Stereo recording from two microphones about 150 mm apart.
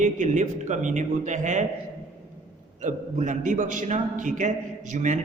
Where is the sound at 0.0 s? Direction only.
55° right (ahead or behind).